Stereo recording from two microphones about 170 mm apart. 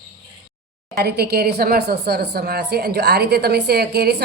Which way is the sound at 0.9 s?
70° right (ahead or behind).